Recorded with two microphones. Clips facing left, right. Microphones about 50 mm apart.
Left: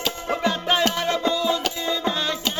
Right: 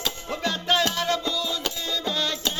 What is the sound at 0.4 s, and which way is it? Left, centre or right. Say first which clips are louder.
Music: left 2 dB; centre.